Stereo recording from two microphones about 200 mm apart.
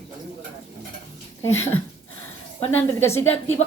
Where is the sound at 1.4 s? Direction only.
10° left (ahead or behind).